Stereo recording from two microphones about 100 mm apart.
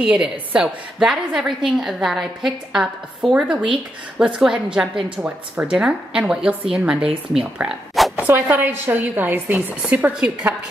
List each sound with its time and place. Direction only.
0.0 s a woman's voice: 10° right (ahead or behind)
8.2 s a woman's voice: 20° right (ahead or behind)